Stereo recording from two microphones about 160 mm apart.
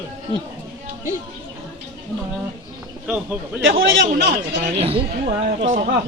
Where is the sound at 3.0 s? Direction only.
5° right (ahead or behind).